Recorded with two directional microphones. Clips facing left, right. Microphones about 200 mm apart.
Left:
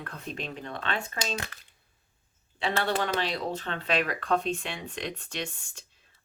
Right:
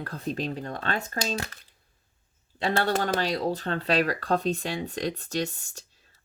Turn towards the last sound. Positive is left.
turn(degrees=-40)  # may be behind; listen again after turning